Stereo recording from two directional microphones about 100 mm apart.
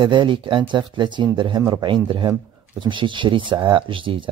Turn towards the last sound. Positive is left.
turn(degrees=-60)  # may be behind; listen again after turning